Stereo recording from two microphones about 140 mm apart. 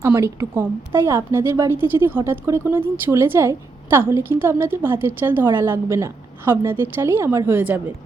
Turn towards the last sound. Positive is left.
turn(degrees=-15)  # may be behind; listen again after turning